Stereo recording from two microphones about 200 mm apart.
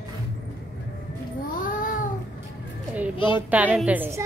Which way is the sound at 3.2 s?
25° left (ahead or behind).